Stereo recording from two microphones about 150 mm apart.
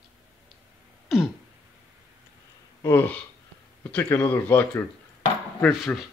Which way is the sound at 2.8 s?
15° left (ahead or behind).